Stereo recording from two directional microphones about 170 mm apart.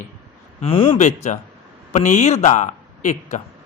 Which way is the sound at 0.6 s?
35° left (ahead or behind).